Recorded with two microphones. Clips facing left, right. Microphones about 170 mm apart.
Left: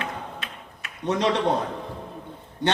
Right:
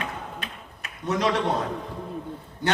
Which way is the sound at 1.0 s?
30° left (ahead or behind).